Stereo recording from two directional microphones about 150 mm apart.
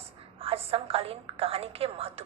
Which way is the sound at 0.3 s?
40° right (ahead or behind).